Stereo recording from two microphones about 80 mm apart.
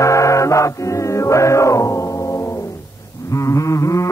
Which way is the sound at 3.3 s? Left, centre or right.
Left.